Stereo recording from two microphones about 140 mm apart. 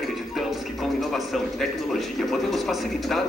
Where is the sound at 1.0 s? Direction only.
Centre (ahead or behind).